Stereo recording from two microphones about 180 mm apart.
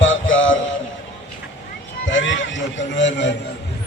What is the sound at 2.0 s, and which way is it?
Music, 90° left.